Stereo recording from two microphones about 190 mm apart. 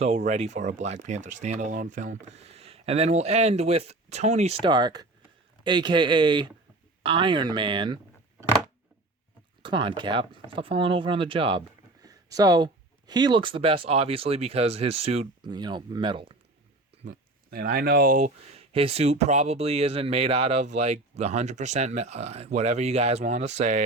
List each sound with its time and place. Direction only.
0.0 s speech: 35° right (ahead or behind)
4.6 s speech: 25° right (ahead or behind)
9.6 s speech: 25° right (ahead or behind)
15.4 s speech: 25° right (ahead or behind)
17.1 s speech: 50° right (ahead or behind)